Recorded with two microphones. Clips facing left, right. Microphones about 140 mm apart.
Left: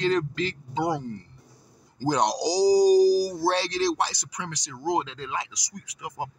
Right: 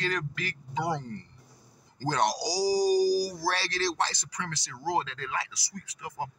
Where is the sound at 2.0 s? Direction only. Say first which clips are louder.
Left 4 dB; 15° left (ahead or behind).